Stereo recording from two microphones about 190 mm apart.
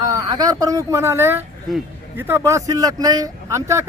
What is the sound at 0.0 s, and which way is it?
Speech, 20° right (ahead or behind).